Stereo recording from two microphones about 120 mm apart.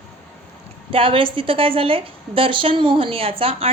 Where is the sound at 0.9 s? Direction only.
50° right (ahead or behind).